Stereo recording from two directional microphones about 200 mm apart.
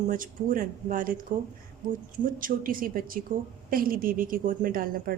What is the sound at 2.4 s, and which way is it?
A woman's voice, 45° right (ahead or behind).